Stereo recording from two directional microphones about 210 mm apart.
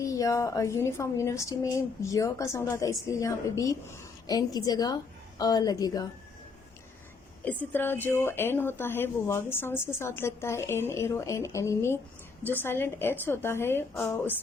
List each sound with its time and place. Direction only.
0.0 s speech: 15° left (ahead or behind)
7.4 s speech: 10° left (ahead or behind)